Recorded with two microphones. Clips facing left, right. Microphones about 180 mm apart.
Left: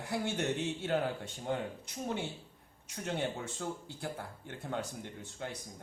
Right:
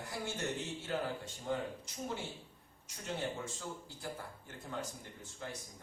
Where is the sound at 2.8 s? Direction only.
60° left (ahead or behind).